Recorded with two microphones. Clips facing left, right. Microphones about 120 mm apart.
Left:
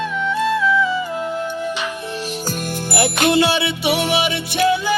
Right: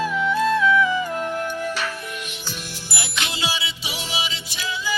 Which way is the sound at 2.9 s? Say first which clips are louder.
Left 15 dB; 55° left (ahead or behind).